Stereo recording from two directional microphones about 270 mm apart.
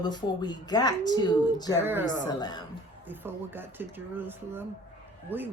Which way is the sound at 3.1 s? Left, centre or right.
Centre.